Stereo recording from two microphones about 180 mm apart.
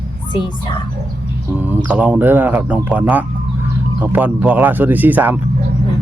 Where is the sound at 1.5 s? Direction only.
10° right (ahead or behind).